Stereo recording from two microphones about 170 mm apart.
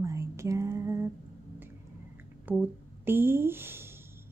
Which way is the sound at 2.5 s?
10° right (ahead or behind).